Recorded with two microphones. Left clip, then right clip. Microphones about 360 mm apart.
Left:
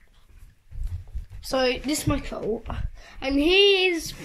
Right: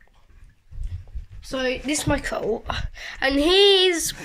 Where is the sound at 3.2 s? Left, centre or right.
Right.